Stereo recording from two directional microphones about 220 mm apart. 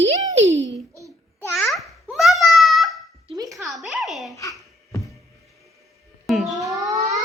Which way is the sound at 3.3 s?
15° right (ahead or behind).